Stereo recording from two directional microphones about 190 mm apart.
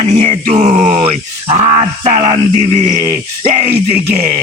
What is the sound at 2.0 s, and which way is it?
Speech, 40° right (ahead or behind).